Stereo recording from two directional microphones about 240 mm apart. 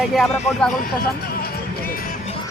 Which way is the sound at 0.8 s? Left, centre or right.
Left.